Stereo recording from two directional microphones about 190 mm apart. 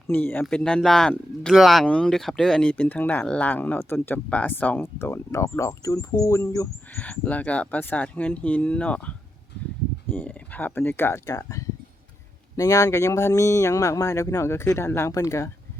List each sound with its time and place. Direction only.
0.1 s speech: 10° left (ahead or behind)